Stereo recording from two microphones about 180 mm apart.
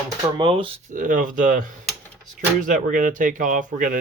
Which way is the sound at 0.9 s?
50° right (ahead or behind).